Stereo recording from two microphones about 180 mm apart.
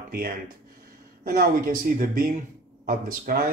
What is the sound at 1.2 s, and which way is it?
Speech, 55° right (ahead or behind).